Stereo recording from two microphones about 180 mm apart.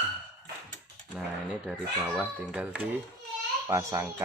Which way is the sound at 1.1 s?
5° right (ahead or behind).